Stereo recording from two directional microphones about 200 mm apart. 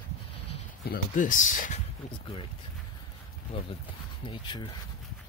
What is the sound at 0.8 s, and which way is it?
Speech, 40° left (ahead or behind).